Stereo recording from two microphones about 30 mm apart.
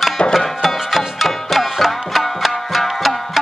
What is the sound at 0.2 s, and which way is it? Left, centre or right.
Music, left.